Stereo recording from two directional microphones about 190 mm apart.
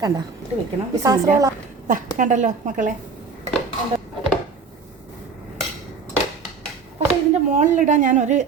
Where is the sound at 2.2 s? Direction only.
40° right (ahead or behind).